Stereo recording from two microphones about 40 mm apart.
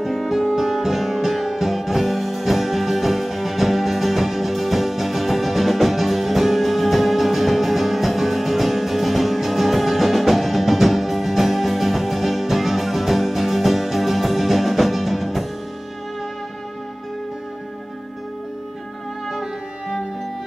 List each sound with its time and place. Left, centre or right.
0.0 s music: centre
19.2 s music: centre